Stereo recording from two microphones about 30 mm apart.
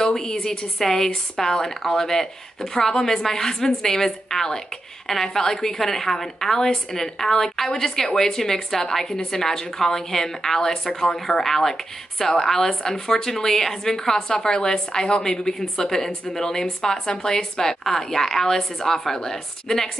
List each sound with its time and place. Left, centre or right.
0.0 s a woman's voice: left